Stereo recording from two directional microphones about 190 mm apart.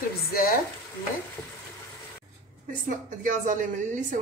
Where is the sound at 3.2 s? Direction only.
40° right (ahead or behind).